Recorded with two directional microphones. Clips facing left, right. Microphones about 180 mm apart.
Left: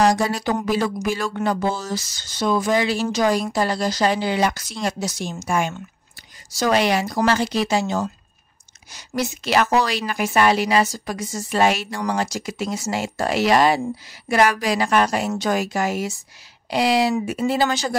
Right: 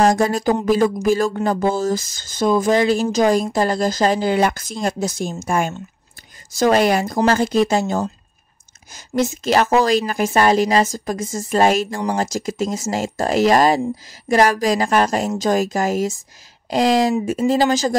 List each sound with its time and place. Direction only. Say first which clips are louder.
0.1 s speech: right 4 dB; 50° right (ahead or behind)
3.2 s speech: right 3 dB; 30° right (ahead or behind)
3.5 s speech: right 3 dB; 45° right (ahead or behind)
9.4 s speech: right 2 dB; 40° right (ahead or behind)
16.8 s speech: right 3 dB; 5° left (ahead or behind)
17.5 s speech: right 5 dB; 40° right (ahead or behind)